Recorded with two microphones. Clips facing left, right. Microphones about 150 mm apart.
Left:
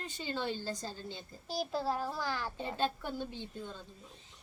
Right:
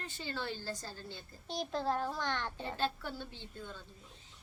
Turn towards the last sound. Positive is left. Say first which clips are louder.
# left 4 dB
turn(degrees=15)  # may be behind; listen again after turning